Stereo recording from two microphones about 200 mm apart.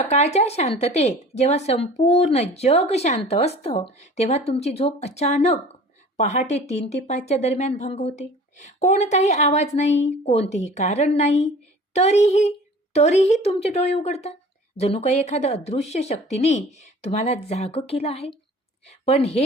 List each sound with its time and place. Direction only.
0.0 s a woman's voice: 35° left (ahead or behind)